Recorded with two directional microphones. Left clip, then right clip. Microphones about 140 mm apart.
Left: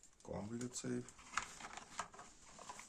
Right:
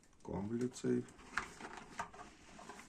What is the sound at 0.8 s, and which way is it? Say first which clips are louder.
Speech: right 9 dB; 35° left (ahead or behind).